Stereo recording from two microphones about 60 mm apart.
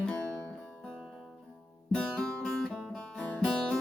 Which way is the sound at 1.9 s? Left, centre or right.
Centre.